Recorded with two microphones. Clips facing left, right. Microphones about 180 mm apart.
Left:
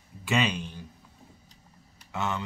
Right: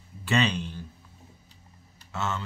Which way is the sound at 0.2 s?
10° left (ahead or behind).